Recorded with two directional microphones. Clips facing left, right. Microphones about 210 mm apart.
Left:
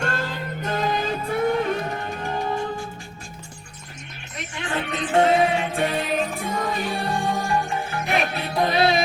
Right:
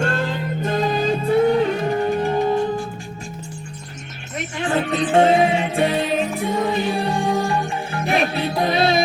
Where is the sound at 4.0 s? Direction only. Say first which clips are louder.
Right 6 dB; 40° right (ahead or behind).